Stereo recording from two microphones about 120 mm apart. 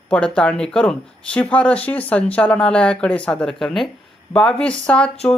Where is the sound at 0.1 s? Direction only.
10° left (ahead or behind).